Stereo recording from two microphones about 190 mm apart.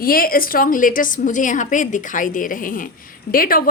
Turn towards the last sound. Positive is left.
turn(degrees=50)  # may be behind; listen again after turning